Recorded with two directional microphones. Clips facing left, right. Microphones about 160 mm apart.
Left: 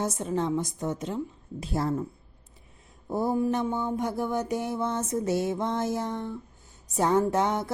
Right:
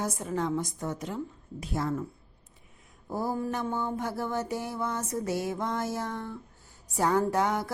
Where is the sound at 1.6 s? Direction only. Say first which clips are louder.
Left 3 dB; 30° left (ahead or behind).